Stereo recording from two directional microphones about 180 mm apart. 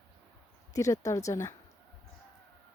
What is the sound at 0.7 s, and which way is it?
Speech, 15° left (ahead or behind).